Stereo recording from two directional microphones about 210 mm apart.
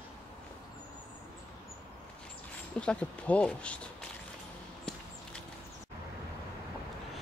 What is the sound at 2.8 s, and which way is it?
Speech, 5° left (ahead or behind).